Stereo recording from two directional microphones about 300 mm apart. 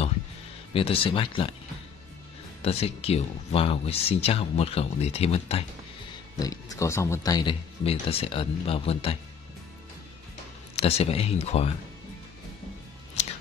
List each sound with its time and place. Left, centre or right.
0.7 s speech: centre
2.6 s speech: centre
10.8 s speech: centre